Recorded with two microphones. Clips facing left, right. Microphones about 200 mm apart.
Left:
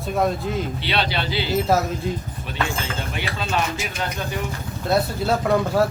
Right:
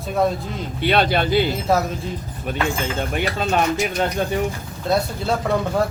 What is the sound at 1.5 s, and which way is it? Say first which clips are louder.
Speech: even; centre (ahead or behind).